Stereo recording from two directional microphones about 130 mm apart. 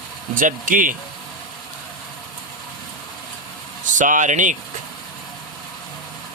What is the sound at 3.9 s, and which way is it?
Speech, 80° right.